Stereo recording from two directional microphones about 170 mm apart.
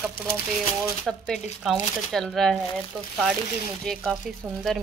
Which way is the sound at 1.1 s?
Centre (ahead or behind).